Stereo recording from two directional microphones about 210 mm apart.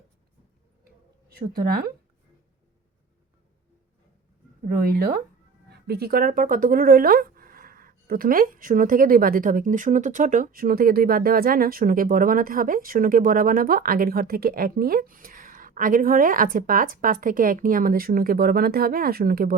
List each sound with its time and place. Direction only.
1.3 s speech: 45° right (ahead or behind)
4.6 s speech: 45° right (ahead or behind)